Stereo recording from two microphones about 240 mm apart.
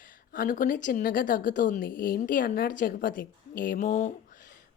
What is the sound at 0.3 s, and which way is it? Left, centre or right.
A woman's voice, left.